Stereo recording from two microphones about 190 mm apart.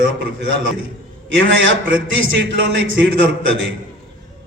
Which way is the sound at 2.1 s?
80° right.